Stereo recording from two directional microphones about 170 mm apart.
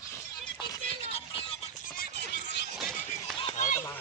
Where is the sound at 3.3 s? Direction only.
35° left (ahead or behind).